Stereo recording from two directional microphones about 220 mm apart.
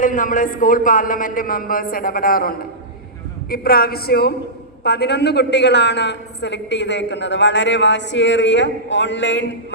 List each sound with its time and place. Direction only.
0.0 s a man's voice: 35° left (ahead or behind); by 9.5 s 55° left (ahead or behind)